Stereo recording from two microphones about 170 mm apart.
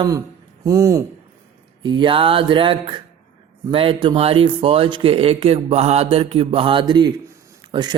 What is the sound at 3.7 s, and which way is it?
Speech, 30° right (ahead or behind).